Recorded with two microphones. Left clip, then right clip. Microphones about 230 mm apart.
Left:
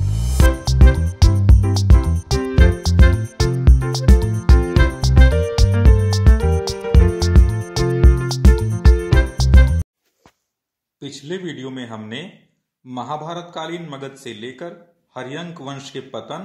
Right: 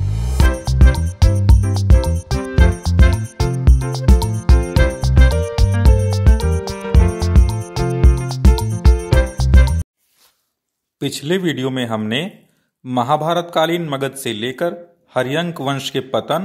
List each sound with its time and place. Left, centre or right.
0.0 s music: centre
11.0 s a man's voice: right